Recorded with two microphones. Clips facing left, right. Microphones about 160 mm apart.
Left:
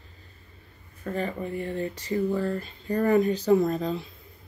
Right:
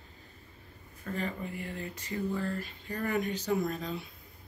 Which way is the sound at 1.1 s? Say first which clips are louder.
Left 6 dB; 40° left (ahead or behind).